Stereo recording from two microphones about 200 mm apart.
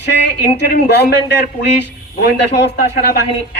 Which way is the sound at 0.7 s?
55° left (ahead or behind).